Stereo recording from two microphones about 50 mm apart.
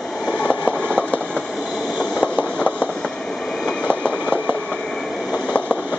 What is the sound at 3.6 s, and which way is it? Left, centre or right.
Train, left.